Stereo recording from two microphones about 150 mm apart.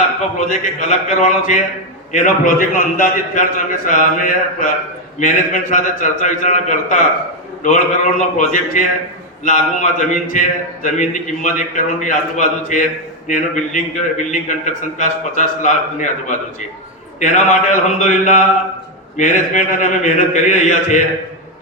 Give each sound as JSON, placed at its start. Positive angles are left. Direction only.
{"t": 0.3, "sound": "a man's voice", "side_deg": 55}